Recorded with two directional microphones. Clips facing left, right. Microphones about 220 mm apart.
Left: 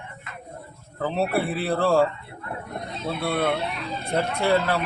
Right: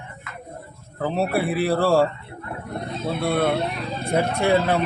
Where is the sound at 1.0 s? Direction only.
10° right (ahead or behind).